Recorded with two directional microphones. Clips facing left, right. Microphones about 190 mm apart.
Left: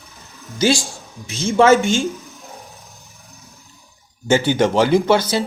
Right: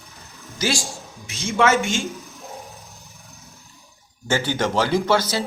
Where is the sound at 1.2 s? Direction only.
30° left (ahead or behind).